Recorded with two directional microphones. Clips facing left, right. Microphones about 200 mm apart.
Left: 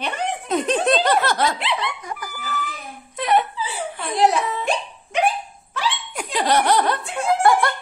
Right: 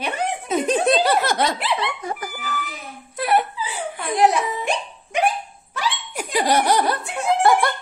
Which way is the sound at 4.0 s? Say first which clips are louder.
Right 1 dB; 15° right (ahead or behind).